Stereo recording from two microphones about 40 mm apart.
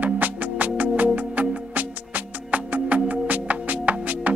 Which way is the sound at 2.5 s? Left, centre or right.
Right.